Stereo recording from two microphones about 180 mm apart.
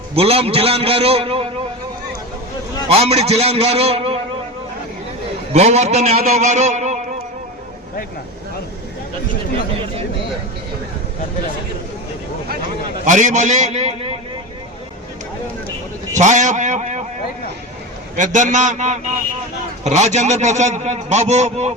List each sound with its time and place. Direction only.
0.2 s a man's voice: 35° right (ahead or behind)
2.9 s a man's voice: 35° right (ahead or behind)
5.5 s a man's voice: 35° right (ahead or behind)
13.1 s a man's voice: 45° right (ahead or behind)
16.1 s a man's voice: 40° right (ahead or behind)
18.2 s a man's voice: 45° right (ahead or behind)